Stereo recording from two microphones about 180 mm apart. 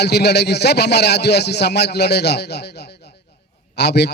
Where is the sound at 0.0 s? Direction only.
65° left (ahead or behind).